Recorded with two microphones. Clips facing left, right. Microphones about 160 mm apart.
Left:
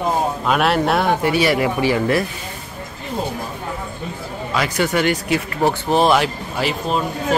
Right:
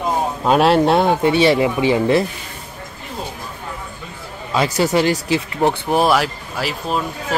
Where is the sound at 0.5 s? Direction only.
30° right (ahead or behind).